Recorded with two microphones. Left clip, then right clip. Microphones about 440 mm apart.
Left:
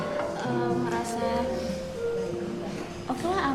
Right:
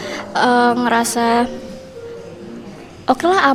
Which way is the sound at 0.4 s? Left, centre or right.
Right.